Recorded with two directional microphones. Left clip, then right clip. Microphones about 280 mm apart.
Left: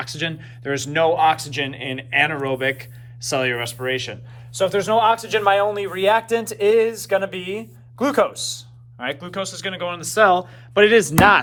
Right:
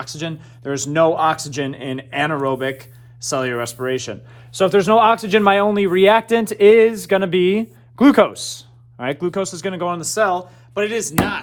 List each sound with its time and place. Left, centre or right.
0.0 s speech: centre
4.5 s a man's voice: right; by 10.1 s centre
10.2 s speech: centre